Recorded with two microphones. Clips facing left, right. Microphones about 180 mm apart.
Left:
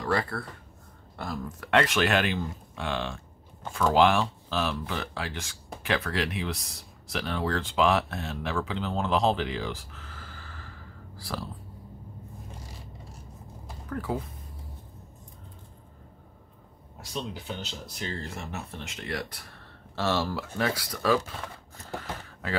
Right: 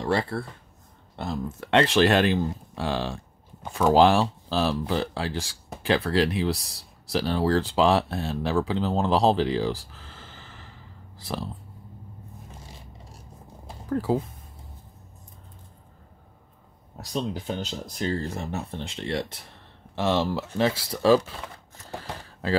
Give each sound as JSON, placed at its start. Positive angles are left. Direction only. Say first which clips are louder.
{"t": 0.0, "sound": "speech", "louder": "right 3 dB", "side_deg": -25}
{"t": 13.8, "sound": "speech", "louder": "right 7 dB", "side_deg": -30}
{"t": 17.0, "sound": "speech", "louder": "right 6 dB", "side_deg": -40}